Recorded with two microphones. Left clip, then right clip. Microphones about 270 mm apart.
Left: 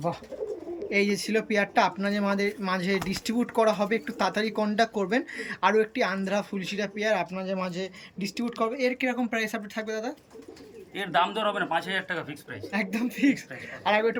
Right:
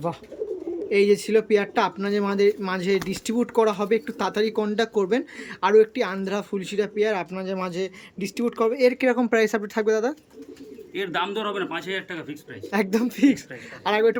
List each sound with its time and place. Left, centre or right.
0.9 s speech: centre
10.9 s speech: centre
12.7 s speech: centre